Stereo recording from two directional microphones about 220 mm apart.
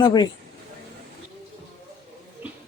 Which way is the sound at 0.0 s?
20° left (ahead or behind).